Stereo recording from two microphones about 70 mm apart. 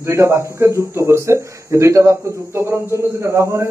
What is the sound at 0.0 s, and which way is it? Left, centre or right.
Speech, right.